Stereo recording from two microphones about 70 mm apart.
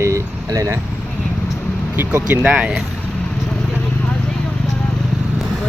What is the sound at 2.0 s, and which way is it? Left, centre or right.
Speech, right.